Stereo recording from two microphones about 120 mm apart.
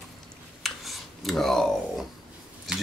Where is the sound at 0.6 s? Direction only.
Centre (ahead or behind).